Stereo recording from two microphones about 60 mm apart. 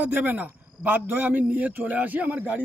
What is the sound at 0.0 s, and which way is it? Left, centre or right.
A man's voice, right.